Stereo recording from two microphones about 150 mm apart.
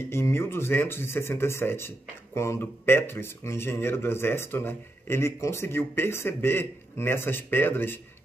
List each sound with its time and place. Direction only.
0.0 s speech: 15° left (ahead or behind)